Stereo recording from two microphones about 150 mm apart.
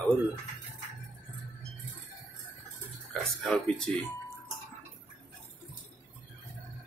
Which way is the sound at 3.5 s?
5° left (ahead or behind).